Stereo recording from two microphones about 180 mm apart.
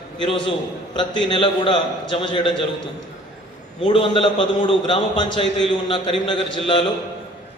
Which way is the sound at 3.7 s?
30° left (ahead or behind).